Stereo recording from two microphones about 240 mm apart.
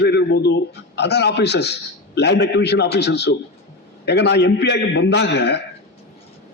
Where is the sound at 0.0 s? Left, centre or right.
Left.